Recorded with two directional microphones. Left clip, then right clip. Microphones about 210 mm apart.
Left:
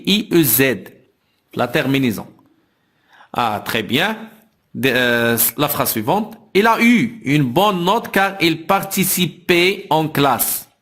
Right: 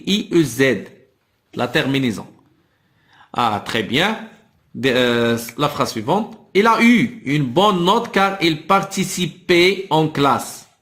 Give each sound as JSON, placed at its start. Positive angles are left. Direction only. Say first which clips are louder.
{"t": 0.0, "sound": "a man's voice", "louder": "left 2 dB", "side_deg": 45}
{"t": 1.5, "sound": "speech", "louder": "left 1 dB", "side_deg": 35}